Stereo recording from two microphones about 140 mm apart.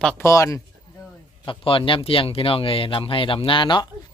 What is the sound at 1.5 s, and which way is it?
A man's voice, 40° left (ahead or behind).